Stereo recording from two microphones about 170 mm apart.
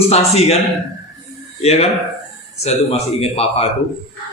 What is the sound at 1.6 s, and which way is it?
A man's voice, 35° left (ahead or behind).